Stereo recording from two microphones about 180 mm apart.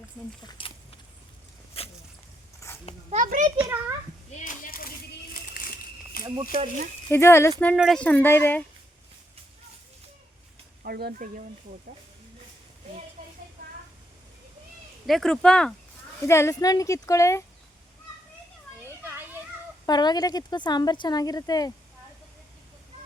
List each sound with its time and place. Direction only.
0.4 s a sound: 30° left (ahead or behind)
1.7 s dog: 35° left (ahead or behind)
2.6 s a sound: 15° left (ahead or behind)
3.1 s a child's voice: 45° right (ahead or behind)
3.6 s a child's voice: 15° right (ahead or behind)
4.4 s speech: 50° left (ahead or behind)
5.3 s a sound: 50° left (ahead or behind)
6.2 s speech: 25° right (ahead or behind)
7.1 s speech: 15° left (ahead or behind)
7.8 s speech: centre (ahead or behind)
10.8 s speech: 60° right (ahead or behind)
15.0 s speech: centre (ahead or behind)
16.2 s speech: 15° left (ahead or behind)
19.8 s speech: 25° left (ahead or behind)